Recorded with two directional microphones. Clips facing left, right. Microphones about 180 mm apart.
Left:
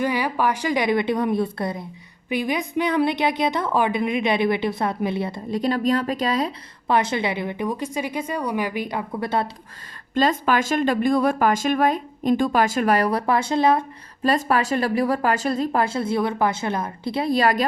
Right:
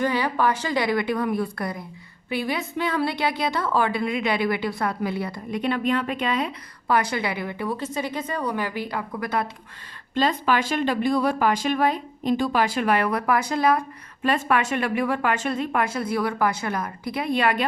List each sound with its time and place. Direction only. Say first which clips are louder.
0.0 s a woman's voice: even; 10° left (ahead or behind); by 6.5 s 35° left (ahead or behind)
6.8 s a woman's voice: left 2 dB; 25° left (ahead or behind)
10.2 s speech: left 2 dB; 45° left (ahead or behind); by 13.8 s 25° left (ahead or behind)
14.3 s a woman's voice: left 2 dB; 35° left (ahead or behind)